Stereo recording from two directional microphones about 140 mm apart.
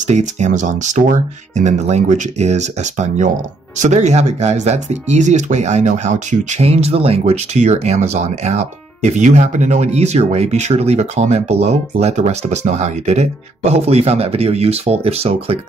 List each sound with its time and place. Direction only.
0.0 s speech: 60° right (ahead or behind)